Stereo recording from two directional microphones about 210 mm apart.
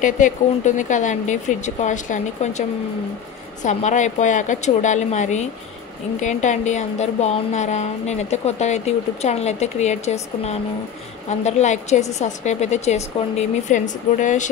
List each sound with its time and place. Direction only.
0.0 s a woman's voice: 35° left (ahead or behind)
3.6 s a woman's voice: 35° left (ahead or behind)